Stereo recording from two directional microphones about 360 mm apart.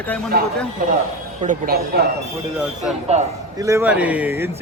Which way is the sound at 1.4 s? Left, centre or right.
Right.